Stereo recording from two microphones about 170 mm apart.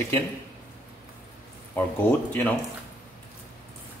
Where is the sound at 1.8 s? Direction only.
10° left (ahead or behind).